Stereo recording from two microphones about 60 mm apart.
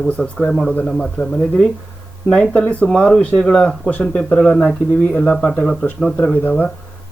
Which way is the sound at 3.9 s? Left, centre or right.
Left.